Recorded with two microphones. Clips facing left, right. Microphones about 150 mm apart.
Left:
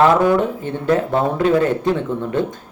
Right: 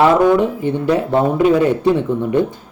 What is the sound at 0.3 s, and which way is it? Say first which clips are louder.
Speech: right 3 dB; 15° right (ahead or behind).